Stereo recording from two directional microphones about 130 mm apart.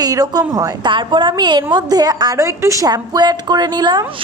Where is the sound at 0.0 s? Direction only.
30° right (ahead or behind).